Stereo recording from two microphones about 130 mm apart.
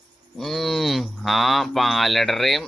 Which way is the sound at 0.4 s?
Centre (ahead or behind).